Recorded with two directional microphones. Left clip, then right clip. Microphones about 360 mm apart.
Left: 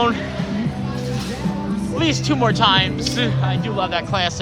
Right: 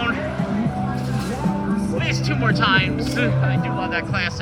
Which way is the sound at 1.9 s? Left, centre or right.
Centre.